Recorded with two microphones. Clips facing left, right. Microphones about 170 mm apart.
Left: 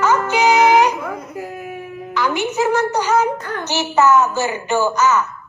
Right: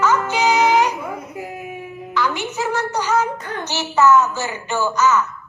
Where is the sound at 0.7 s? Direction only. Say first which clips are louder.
Left 3 dB; 15° left (ahead or behind).